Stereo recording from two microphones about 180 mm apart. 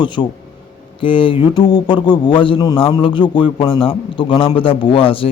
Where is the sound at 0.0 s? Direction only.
25° left (ahead or behind).